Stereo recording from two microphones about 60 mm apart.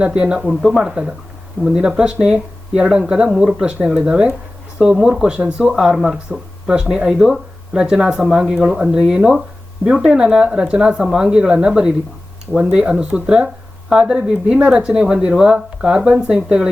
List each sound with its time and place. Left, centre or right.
0.0 s speech: centre